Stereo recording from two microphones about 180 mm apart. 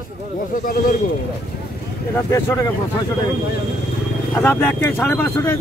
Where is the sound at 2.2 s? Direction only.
15° left (ahead or behind).